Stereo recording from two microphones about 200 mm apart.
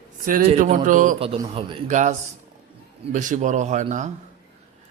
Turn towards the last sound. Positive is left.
turn(degrees=-40)  # may be behind; listen again after turning